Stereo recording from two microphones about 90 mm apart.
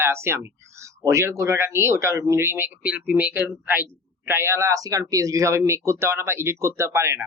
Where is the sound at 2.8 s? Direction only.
15° right (ahead or behind).